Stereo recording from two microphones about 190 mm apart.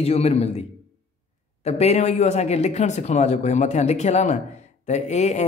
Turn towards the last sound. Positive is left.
turn(degrees=35)  # may be behind; listen again after turning